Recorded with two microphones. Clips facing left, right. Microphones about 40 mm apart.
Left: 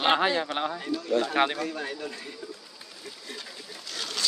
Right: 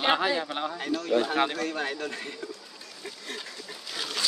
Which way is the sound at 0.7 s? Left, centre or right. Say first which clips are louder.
Right 4 dB; right.